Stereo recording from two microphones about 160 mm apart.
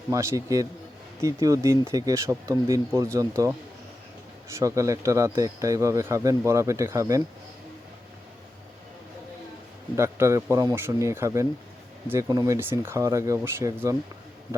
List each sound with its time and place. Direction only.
0.1 s speech: 20° right (ahead or behind)
9.9 s speech: 15° right (ahead or behind)